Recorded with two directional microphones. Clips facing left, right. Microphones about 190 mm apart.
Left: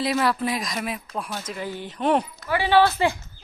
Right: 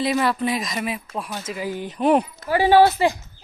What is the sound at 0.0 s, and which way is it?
Speech, centre (ahead or behind).